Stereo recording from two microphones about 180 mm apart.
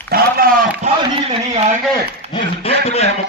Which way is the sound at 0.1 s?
55° right (ahead or behind).